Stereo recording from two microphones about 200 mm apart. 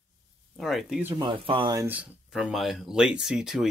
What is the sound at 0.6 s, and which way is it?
Speech, centre (ahead or behind).